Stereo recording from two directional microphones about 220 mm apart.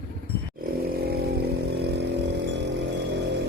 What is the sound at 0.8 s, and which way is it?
Vehicle, 45° right (ahead or behind).